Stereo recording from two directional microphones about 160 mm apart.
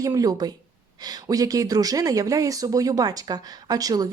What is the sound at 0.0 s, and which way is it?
Speech, 20° right (ahead or behind).